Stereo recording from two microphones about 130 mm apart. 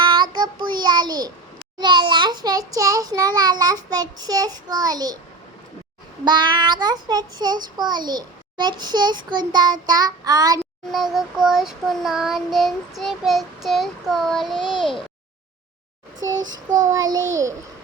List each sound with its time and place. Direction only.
0.0 s child singing: 35° right (ahead or behind)
6.2 s child singing: 35° right (ahead or behind)
10.9 s child singing: centre (ahead or behind)
16.9 s child singing: 25° right (ahead or behind)